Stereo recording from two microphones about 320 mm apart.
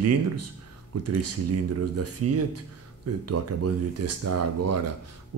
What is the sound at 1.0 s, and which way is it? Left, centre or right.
Speech, right.